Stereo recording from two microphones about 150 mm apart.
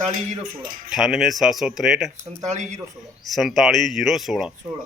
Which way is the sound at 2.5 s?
50° right (ahead or behind).